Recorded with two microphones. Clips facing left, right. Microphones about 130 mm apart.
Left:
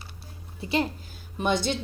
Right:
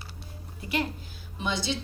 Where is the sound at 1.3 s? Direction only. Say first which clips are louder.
Left 5 dB; 50° left (ahead or behind).